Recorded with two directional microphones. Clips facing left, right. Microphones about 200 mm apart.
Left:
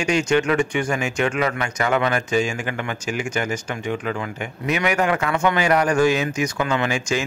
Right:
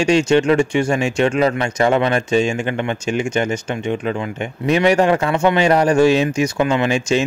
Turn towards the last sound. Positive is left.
turn(degrees=-25)  # may be behind; listen again after turning